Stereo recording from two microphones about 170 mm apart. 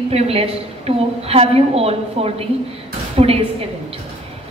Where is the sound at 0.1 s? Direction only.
35° right (ahead or behind).